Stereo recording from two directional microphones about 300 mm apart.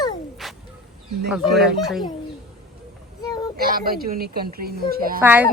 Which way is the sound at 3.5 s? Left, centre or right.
Right.